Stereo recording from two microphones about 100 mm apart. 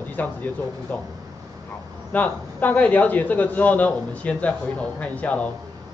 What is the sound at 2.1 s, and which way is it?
A man's voice, 15° left (ahead or behind).